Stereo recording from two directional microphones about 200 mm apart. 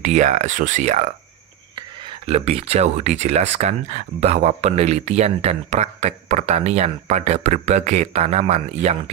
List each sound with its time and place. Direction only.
0.0 s speech: 35° right (ahead or behind)